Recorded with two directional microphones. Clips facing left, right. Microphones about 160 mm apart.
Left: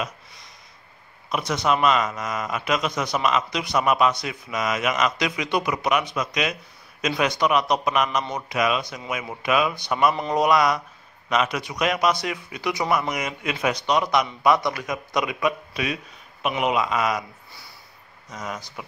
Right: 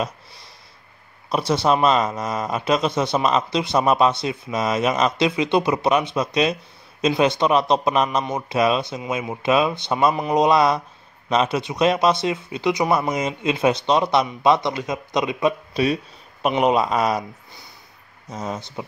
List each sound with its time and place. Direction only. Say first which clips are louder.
0.0 s a man's voice: right 4 dB; 30° right (ahead or behind)
10.1 s speech: right 4 dB; 10° right (ahead or behind)
10.4 s a man's voice: right 2 dB; 30° right (ahead or behind)
18.3 s a man's voice: right 5 dB; 30° right (ahead or behind)